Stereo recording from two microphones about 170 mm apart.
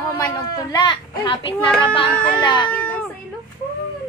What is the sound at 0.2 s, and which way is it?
A child's voice, 25° left (ahead or behind).